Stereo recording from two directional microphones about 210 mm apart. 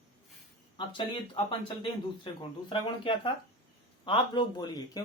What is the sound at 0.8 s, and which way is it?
Speech, 25° left (ahead or behind).